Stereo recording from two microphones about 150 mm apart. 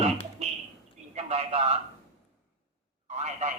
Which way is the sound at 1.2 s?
45° right (ahead or behind).